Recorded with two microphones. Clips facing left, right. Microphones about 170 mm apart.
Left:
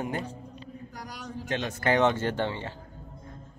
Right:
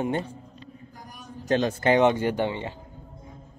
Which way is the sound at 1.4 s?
40° right (ahead or behind).